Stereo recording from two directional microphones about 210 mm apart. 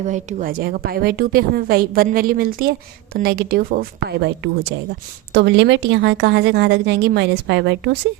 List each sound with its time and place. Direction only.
0.0 s a woman's voice: 35° right (ahead or behind)
5.3 s a woman's voice: 55° right (ahead or behind)